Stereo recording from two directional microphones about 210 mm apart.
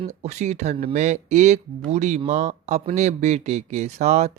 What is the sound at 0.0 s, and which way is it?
Speech, 30° right (ahead or behind).